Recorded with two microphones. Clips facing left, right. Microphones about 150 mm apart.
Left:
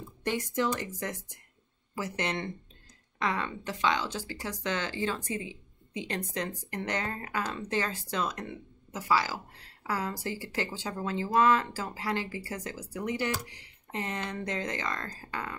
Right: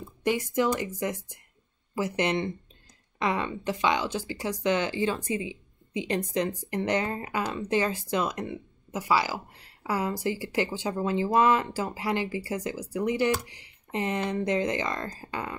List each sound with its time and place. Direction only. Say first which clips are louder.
0.2 s speech: right 4 dB; 10° right (ahead or behind)